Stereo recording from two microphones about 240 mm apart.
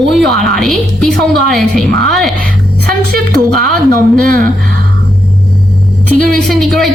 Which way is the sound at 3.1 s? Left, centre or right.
Right.